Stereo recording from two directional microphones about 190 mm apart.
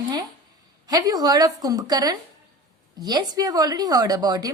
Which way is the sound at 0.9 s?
20° right (ahead or behind).